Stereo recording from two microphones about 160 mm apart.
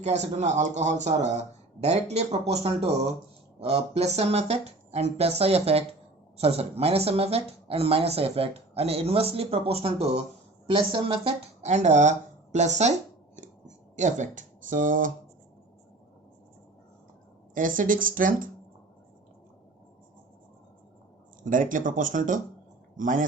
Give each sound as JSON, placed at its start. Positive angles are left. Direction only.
{"t": 0.0, "sound": "a man's voice", "side_deg": -45}
{"t": 12.5, "sound": "a sound", "side_deg": -45}
{"t": 17.5, "sound": "speech", "side_deg": -60}
{"t": 21.4, "sound": "speech", "side_deg": -55}